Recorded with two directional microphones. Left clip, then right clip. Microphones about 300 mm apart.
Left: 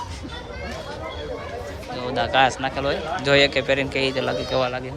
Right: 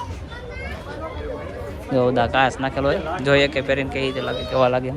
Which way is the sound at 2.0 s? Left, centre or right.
Centre.